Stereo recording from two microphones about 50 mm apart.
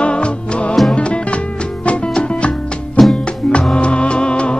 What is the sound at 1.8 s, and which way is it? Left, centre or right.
Music, left.